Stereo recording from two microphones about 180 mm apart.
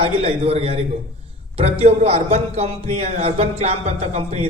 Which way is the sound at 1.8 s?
35° right (ahead or behind).